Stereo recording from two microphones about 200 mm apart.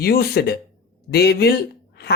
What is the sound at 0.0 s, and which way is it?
A woman's voice, 50° left (ahead or behind).